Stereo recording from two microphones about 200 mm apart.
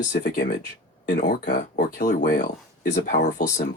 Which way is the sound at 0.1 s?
55° left (ahead or behind).